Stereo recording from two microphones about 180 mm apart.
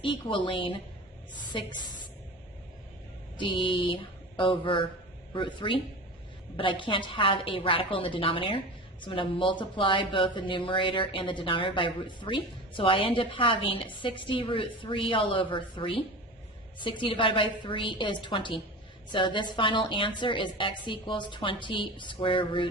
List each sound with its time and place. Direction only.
0.0 s a woman's voice: 25° left (ahead or behind)
3.3 s a woman's voice: 30° left (ahead or behind)